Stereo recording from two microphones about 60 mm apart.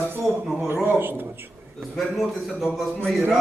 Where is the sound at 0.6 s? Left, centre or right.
Right.